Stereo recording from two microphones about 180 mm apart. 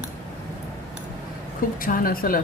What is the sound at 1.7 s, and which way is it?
Speech, 50° left (ahead or behind).